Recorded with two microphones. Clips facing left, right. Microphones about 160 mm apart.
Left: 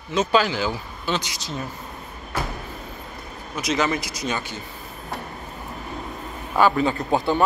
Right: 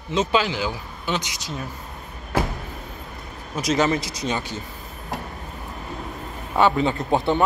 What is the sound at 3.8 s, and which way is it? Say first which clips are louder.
Speech: right 2 dB; 30° right (ahead or behind).